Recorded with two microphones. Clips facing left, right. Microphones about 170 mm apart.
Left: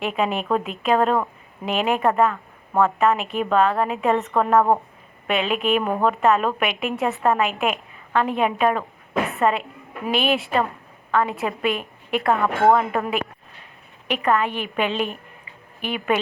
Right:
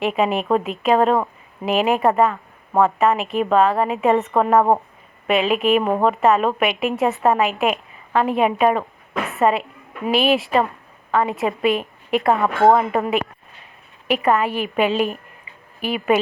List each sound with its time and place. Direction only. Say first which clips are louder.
0.0 s a woman's voice: right 4 dB; centre (ahead or behind)
14.3 s speech: right 1 dB; 5° right (ahead or behind)